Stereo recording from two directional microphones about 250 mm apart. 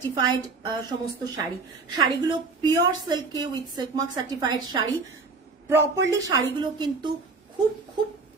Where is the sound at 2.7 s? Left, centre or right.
Centre.